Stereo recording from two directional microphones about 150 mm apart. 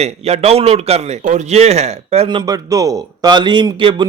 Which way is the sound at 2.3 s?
30° right (ahead or behind).